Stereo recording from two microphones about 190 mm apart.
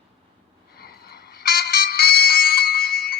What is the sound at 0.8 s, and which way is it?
Ringtone, 55° left (ahead or behind).